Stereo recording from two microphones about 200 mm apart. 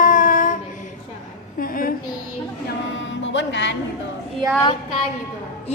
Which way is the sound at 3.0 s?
65° left (ahead or behind).